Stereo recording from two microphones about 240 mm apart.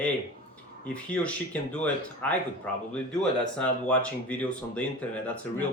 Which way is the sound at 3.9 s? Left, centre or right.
Centre.